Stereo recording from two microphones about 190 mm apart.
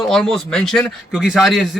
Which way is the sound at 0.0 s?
Centre (ahead or behind).